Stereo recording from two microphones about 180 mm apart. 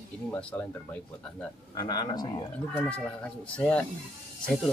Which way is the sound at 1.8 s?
25° left (ahead or behind).